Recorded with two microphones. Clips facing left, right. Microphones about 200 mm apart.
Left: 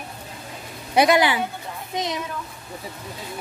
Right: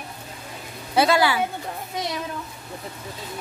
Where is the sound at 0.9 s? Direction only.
20° left (ahead or behind).